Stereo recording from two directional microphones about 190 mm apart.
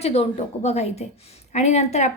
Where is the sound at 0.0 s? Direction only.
35° left (ahead or behind).